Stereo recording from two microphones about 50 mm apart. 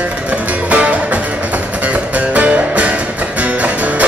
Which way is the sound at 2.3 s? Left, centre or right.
Right.